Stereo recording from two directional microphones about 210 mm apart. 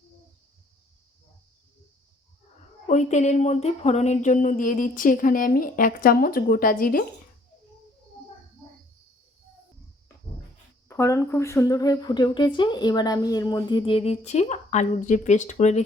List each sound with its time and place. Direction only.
2.8 s speech: 35° left (ahead or behind)
10.8 s speech: 10° left (ahead or behind); by 15.8 s 35° left (ahead or behind)